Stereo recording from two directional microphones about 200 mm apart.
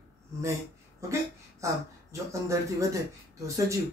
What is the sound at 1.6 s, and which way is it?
Speech, 15° right (ahead or behind).